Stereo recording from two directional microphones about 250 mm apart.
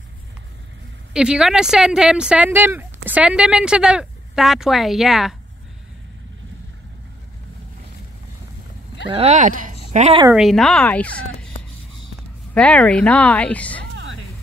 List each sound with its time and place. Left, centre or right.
1.1 s a woman's voice: centre
9.1 s speech: right
10.3 s a woman's voice: centre
12.5 s a woman's voice: centre